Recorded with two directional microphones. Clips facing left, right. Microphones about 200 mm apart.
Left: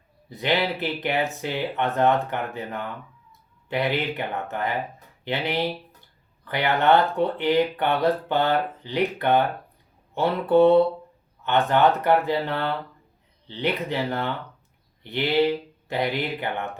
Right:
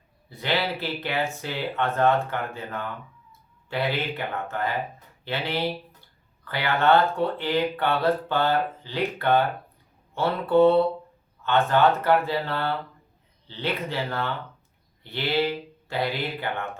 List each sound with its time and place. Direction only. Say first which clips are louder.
0.3 s speech: left 3 dB; 15° left (ahead or behind)